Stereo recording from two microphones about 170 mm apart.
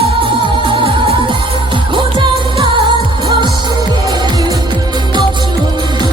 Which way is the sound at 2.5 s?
30° right (ahead or behind).